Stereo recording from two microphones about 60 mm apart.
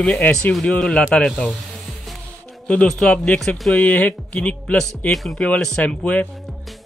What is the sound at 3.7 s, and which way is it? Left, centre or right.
Speech, left.